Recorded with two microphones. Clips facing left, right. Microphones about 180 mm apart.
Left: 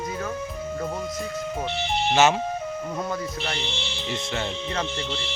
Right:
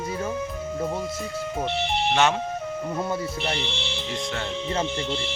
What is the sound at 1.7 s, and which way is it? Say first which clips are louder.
Music: right 1 dB; 60° right (ahead or behind).